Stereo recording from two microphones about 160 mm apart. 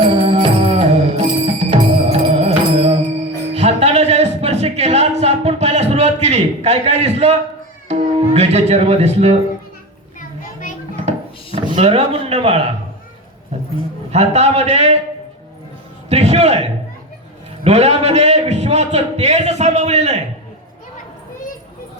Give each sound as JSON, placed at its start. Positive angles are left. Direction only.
{"t": 0.0, "sound": "music", "side_deg": -35}
{"t": 5.2, "sound": "a sound", "side_deg": -40}
{"t": 7.9, "sound": "speech", "side_deg": -40}
{"t": 11.8, "sound": "a man's voice", "side_deg": -40}
{"t": 14.1, "sound": "a man's voice", "side_deg": -40}
{"t": 16.0, "sound": "a sound", "side_deg": -45}
{"t": 17.6, "sound": "a man's voice", "side_deg": -45}